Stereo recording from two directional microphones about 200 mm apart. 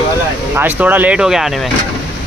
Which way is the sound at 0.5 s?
10° right (ahead or behind).